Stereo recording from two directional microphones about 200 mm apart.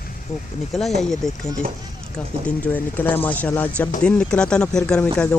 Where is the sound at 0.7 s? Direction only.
Centre (ahead or behind).